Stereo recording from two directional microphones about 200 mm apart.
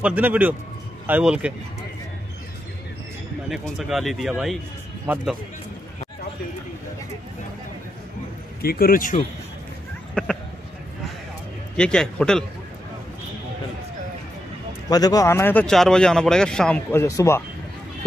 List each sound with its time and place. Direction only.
0.0 s a man's voice: 10° right (ahead or behind)
3.4 s speech: centre (ahead or behind)
8.6 s speech: 50° left (ahead or behind)
10.2 s speech: 5° left (ahead or behind)
11.7 s speech: 5° left (ahead or behind)
14.9 s speech: 20° left (ahead or behind)